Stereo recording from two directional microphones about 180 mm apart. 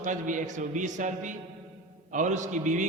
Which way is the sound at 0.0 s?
45° right (ahead or behind).